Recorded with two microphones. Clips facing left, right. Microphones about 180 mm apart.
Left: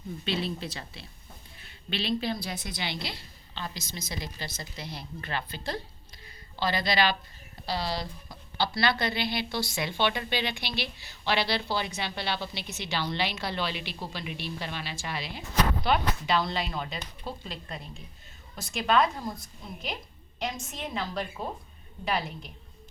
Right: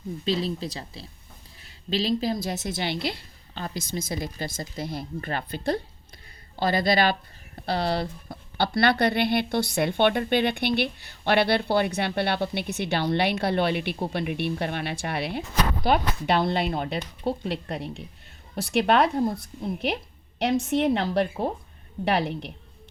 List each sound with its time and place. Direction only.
0.3 s a woman's voice: 30° right (ahead or behind); by 7.2 s 50° right (ahead or behind)
7.6 s a woman's voice: 60° right (ahead or behind)